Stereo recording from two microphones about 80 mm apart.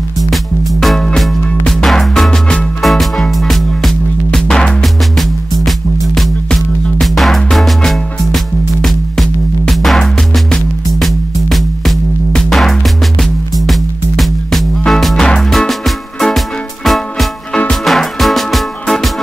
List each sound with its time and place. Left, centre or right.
0.2 s music: centre